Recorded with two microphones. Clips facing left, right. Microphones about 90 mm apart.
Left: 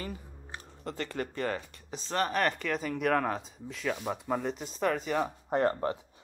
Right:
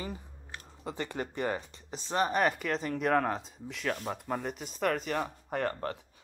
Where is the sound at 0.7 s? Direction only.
10° right (ahead or behind).